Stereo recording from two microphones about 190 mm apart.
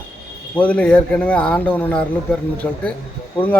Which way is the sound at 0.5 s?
5° left (ahead or behind).